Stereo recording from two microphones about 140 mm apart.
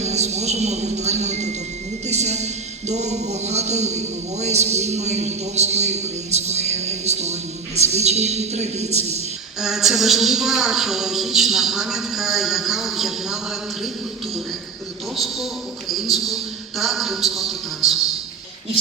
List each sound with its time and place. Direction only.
0.0 s speech: 55° right (ahead or behind)
9.6 s a woman's voice: centre (ahead or behind)
15.1 s a woman's voice: centre (ahead or behind)